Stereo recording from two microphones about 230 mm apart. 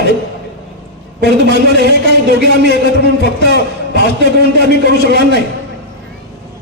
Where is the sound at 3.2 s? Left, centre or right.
Left.